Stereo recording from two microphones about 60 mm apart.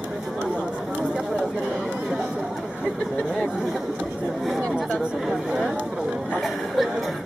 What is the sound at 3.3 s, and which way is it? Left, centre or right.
Speech, centre.